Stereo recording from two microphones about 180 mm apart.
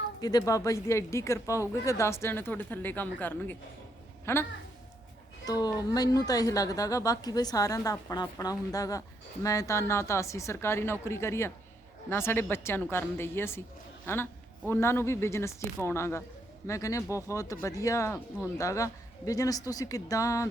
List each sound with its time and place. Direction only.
0.2 s speech: 20° left (ahead or behind)
5.5 s a woman's voice: 20° left (ahead or behind)